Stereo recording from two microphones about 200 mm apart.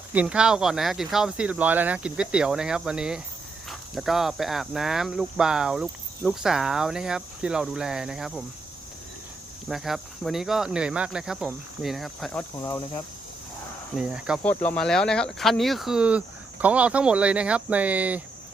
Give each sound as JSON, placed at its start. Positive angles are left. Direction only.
{"t": 0.1, "sound": "speech", "side_deg": -5}
{"t": 9.6, "sound": "speech", "side_deg": 0}
{"t": 12.5, "sound": "speech", "side_deg": 15}
{"t": 13.9, "sound": "speech", "side_deg": -5}
{"t": 14.4, "sound": "speech", "side_deg": 10}